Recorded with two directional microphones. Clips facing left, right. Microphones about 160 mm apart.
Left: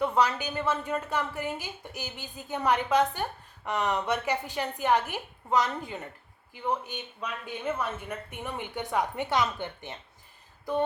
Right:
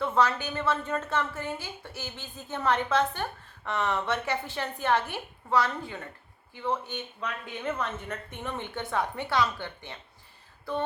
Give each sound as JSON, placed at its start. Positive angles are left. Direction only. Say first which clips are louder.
{"t": 0.0, "sound": "a woman's voice", "louder": "even", "side_deg": 15}